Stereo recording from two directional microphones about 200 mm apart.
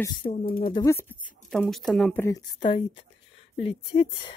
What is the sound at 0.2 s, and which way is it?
Speech, 30° left (ahead or behind).